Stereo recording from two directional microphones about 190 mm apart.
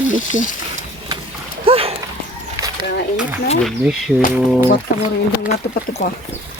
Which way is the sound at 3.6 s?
Centre (ahead or behind).